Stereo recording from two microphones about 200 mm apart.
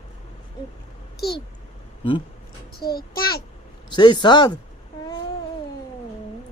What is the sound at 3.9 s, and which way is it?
Speech, 20° left (ahead or behind).